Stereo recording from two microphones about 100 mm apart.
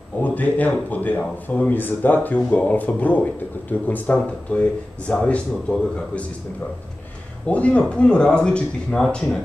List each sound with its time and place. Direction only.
0.2 s speech: 15° left (ahead or behind)
7.4 s speech: 15° left (ahead or behind)